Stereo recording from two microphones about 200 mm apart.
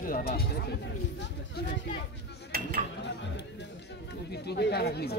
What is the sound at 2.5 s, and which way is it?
Speech, 45° right (ahead or behind).